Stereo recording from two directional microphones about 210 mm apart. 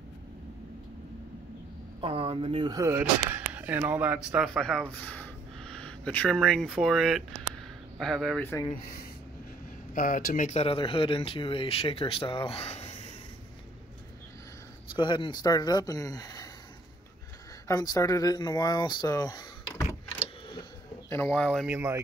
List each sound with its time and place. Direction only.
2.0 s speech: 25° right (ahead or behind); by 8.6 s 10° left (ahead or behind)
9.9 s speech: 40° left (ahead or behind)
14.9 s speech: 20° left (ahead or behind)
17.6 s speech: 15° left (ahead or behind)
21.1 s speech: 10° left (ahead or behind)
21.6 s speech: 10° right (ahead or behind)